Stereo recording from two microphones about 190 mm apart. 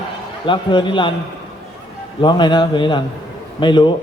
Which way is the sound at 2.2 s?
25° left (ahead or behind).